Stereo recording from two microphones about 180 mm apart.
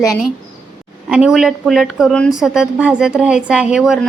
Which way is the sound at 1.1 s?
5° right (ahead or behind).